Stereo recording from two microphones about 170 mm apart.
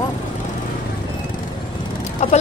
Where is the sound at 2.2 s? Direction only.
40° left (ahead or behind).